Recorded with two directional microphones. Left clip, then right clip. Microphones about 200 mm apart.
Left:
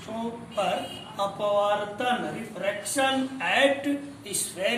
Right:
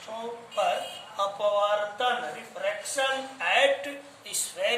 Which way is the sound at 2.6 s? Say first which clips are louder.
Left 2 dB; 20° right (ahead or behind).